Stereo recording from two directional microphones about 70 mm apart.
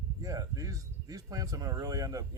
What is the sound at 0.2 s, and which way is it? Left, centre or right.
Speech, right.